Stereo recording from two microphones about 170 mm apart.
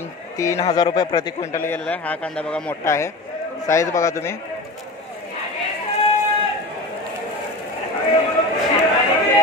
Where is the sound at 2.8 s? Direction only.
15° left (ahead or behind).